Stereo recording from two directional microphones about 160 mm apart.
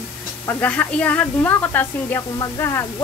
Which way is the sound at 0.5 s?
10° left (ahead or behind).